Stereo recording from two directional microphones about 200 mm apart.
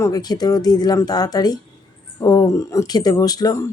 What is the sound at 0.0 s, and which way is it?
Speech, 20° left (ahead or behind).